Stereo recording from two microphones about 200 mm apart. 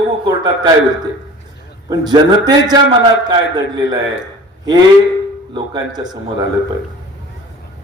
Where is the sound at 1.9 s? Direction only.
20° right (ahead or behind).